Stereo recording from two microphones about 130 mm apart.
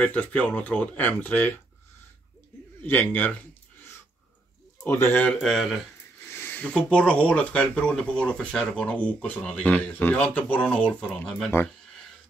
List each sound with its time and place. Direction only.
0.0 s speech: 10° left (ahead or behind)
2.8 s speech: 15° left (ahead or behind)
4.8 s speech: 15° left (ahead or behind)
5.4 s speech: centre (ahead or behind)
6.2 s speech: 15° left (ahead or behind)